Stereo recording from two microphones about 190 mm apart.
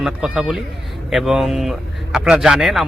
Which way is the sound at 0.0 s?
Centre (ahead or behind).